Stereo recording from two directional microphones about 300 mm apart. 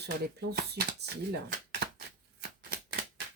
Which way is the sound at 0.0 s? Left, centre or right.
Right.